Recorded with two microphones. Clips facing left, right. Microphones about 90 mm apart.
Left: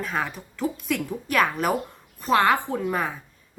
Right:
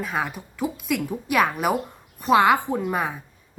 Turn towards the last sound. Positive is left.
turn(degrees=-15)  # may be behind; listen again after turning